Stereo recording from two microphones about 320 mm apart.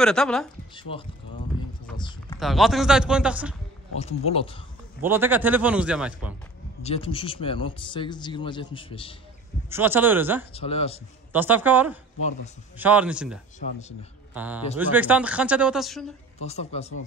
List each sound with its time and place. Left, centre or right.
0.0 s speech: centre
0.7 s speech: centre
2.0 s a sound: centre
2.4 s speech: centre
4.0 s speech: centre
5.0 s speech: centre
6.8 s speech: centre
9.7 s speech: centre
10.5 s speech: centre
11.3 s speech: centre
13.6 s speech: left
14.3 s a man's voice: centre
16.3 s speech: centre